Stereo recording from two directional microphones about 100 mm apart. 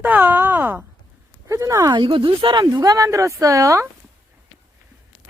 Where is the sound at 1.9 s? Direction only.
55° right (ahead or behind); by 3.8 s 30° right (ahead or behind).